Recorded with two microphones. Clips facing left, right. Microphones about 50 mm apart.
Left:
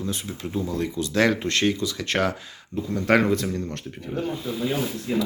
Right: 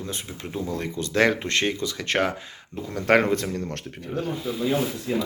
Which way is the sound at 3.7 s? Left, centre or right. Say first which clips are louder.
Even; right.